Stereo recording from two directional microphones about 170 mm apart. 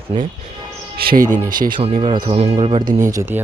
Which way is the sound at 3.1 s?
15° right (ahead or behind).